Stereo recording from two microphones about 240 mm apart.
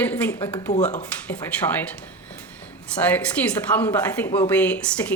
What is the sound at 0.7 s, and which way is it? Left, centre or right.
Speech, left.